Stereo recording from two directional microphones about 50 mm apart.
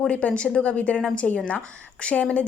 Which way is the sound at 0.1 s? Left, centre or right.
Left.